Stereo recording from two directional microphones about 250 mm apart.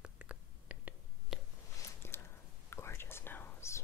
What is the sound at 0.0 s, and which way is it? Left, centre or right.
Whispering, centre.